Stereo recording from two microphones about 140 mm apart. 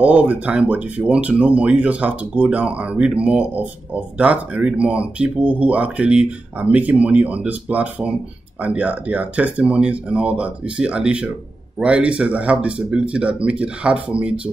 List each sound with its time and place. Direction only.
0.0 s speech: 10° right (ahead or behind)